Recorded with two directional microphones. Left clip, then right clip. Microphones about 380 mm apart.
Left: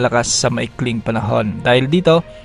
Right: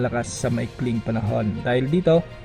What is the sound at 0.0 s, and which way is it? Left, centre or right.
A man's voice, centre.